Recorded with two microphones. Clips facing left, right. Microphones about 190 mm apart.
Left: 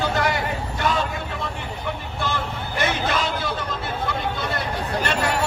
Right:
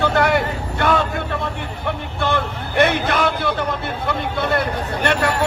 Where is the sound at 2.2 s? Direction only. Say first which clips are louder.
Right 7 dB; 60° right (ahead or behind).